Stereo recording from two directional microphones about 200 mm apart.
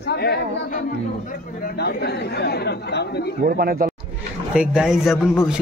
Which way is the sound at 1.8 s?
55° left (ahead or behind).